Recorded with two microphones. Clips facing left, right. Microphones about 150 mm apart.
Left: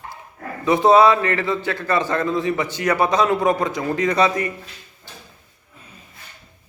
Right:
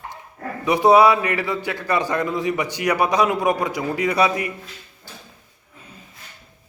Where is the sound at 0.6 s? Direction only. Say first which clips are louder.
Even; 15° right (ahead or behind).